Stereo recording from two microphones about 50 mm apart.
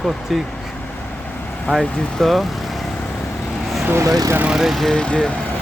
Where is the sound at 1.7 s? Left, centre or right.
Centre.